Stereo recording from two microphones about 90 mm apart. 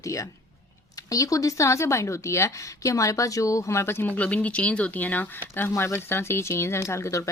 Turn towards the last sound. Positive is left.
turn(degrees=35)  # may be behind; listen again after turning